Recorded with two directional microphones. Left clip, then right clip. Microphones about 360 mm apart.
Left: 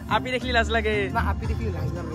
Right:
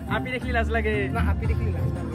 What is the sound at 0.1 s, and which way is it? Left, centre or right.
Speech, left.